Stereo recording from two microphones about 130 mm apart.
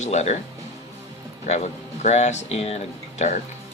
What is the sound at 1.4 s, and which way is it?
Speech, 60° left (ahead or behind).